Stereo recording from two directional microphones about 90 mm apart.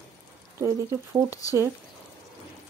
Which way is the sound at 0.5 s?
30° right (ahead or behind).